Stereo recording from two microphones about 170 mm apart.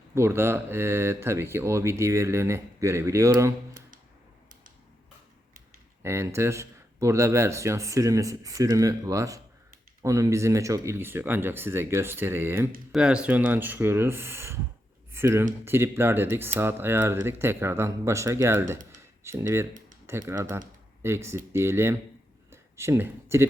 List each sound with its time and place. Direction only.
0.1 s speech: 15° right (ahead or behind)
6.0 s speech: 15° right (ahead or behind)